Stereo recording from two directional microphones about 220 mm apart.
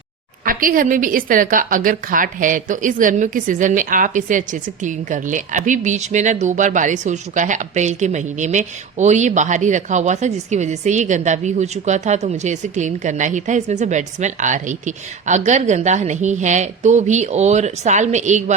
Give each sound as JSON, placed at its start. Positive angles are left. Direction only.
{"t": 0.4, "sound": "a woman's voice", "side_deg": -40}